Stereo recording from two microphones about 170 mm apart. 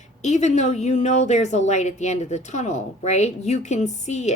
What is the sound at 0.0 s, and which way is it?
Speech, 40° left (ahead or behind).